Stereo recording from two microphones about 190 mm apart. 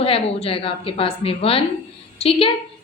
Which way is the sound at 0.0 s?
30° left (ahead or behind).